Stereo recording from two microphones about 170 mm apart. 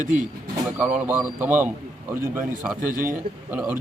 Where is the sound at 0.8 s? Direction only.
5° right (ahead or behind).